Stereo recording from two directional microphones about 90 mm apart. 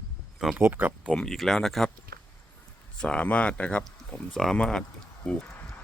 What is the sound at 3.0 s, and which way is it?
Speech, 10° left (ahead or behind).